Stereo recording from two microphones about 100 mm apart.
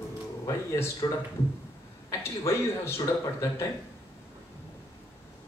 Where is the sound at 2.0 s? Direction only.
25° left (ahead or behind).